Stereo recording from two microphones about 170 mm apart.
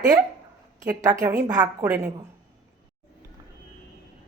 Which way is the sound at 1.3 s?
20° right (ahead or behind).